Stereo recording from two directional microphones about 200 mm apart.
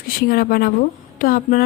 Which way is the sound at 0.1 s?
45° left (ahead or behind).